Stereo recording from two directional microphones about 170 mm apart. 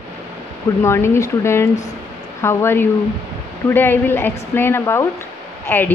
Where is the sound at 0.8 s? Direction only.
15° left (ahead or behind).